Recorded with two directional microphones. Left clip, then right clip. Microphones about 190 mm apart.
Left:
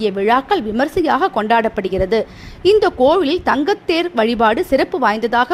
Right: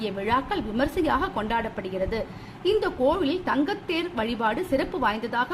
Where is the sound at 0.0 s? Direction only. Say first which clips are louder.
Left 10 dB; 40° left (ahead or behind).